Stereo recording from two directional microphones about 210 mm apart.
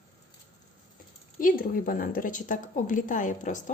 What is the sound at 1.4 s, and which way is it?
A woman's voice, 40° left (ahead or behind).